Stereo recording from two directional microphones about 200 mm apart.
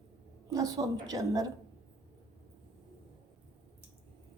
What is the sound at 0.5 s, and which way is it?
Speech, 20° right (ahead or behind).